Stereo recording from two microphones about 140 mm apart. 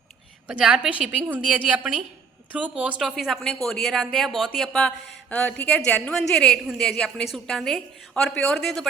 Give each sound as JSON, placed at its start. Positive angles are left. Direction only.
{"t": 0.4, "sound": "a woman's voice", "side_deg": -5}